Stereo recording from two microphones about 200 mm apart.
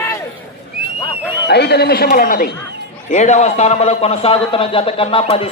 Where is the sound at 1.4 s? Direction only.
55° left (ahead or behind).